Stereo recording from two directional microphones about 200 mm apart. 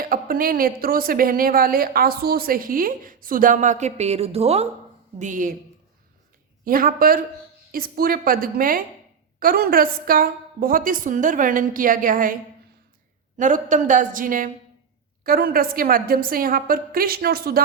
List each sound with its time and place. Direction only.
0.0 s a woman's voice: 45° right (ahead or behind)
6.7 s a woman's voice: 45° right (ahead or behind)
13.3 s a woman's voice: 40° right (ahead or behind)